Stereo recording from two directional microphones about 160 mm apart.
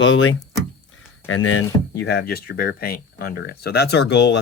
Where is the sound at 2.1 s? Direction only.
80° left.